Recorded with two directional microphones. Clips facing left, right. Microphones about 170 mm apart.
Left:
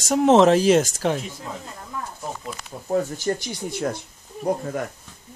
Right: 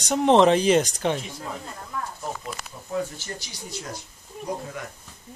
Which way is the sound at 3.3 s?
50° left (ahead or behind).